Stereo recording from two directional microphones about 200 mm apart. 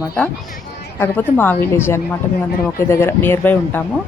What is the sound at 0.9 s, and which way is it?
Speech, 10° left (ahead or behind).